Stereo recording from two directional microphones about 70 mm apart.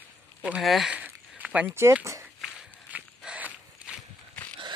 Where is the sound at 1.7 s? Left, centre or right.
Right.